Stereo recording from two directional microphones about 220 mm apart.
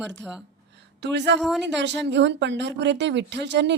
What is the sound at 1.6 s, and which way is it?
Speech, 50° right (ahead or behind).